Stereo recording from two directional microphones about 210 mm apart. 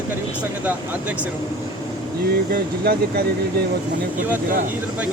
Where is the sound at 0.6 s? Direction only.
10° right (ahead or behind).